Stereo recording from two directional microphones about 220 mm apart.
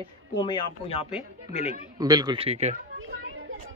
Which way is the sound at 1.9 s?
20° right (ahead or behind).